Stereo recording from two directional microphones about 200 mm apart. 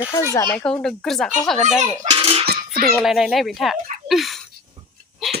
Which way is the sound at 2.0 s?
25° right (ahead or behind).